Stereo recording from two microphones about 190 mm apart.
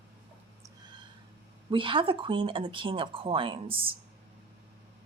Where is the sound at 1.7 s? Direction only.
25° right (ahead or behind).